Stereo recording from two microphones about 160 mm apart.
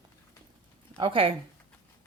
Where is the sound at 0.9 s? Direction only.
30° right (ahead or behind).